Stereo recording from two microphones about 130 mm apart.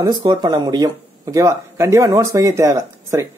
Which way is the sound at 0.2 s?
35° right (ahead or behind).